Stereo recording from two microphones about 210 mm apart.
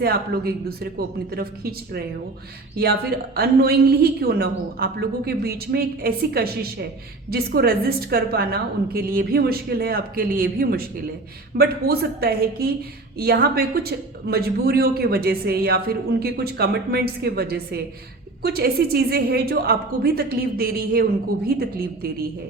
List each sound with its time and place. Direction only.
0.0 s speech: 50° right (ahead or behind)